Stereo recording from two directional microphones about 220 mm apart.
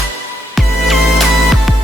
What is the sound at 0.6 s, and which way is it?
Music, centre (ahead or behind).